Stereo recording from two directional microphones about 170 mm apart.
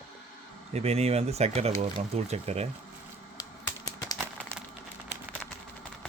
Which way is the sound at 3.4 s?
20° left (ahead or behind).